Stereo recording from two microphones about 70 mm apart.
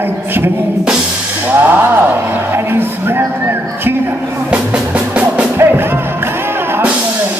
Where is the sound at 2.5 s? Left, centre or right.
Right.